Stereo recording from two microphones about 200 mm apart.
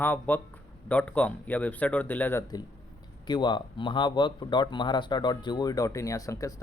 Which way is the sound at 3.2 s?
20° left (ahead or behind).